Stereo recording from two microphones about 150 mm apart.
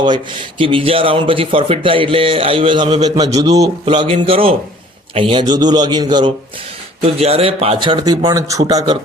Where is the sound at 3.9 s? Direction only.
35° right (ahead or behind).